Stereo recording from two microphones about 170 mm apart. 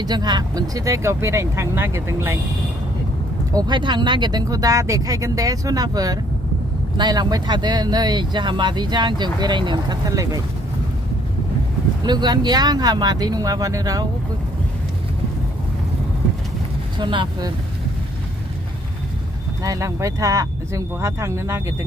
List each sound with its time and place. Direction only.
0.0 s speech: 25° right (ahead or behind)
3.5 s speech: 25° right (ahead or behind)
12.0 s speech: 25° right (ahead or behind)
17.0 s speech: 25° right (ahead or behind)
19.6 s speech: 20° right (ahead or behind)